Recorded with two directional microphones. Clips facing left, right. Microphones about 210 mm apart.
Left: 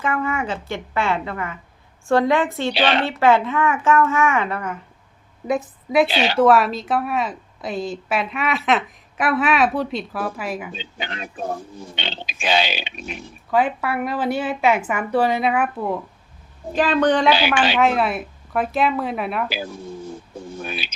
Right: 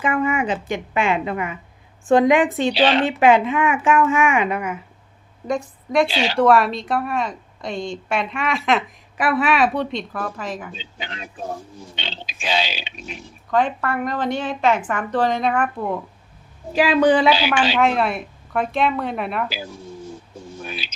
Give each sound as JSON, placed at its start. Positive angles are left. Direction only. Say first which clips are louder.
{"t": 0.0, "sound": "speech", "louder": "right 3 dB", "side_deg": -15}
{"t": 2.7, "sound": "speech", "louder": "right 2 dB", "side_deg": 60}
{"t": 3.0, "sound": "speech", "louder": "right 2 dB", "side_deg": -15}
{"t": 5.5, "sound": "a woman's voice", "louder": "left 1 dB", "side_deg": 5}
{"t": 6.1, "sound": "speech", "louder": "left 2 dB", "side_deg": 60}
{"t": 6.3, "sound": "a woman's voice", "louder": "even", "side_deg": 0}
{"t": 10.8, "sound": "speech", "louder": "left 3 dB", "side_deg": 60}
{"t": 13.5, "sound": "speech", "louder": "even", "side_deg": 5}
{"t": 16.7, "sound": "a woman's voice", "louder": "right 2 dB", "side_deg": -10}
{"t": 20.6, "sound": "bird", "louder": "left 2 dB", "side_deg": 55}